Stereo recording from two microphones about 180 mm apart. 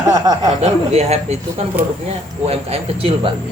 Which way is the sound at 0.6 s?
35° right (ahead or behind).